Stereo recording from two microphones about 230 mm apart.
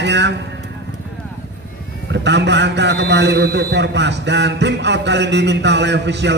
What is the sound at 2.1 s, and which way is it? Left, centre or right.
A man's voice, right.